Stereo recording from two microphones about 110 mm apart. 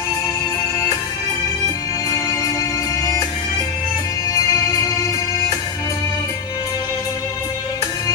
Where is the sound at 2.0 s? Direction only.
30° left (ahead or behind).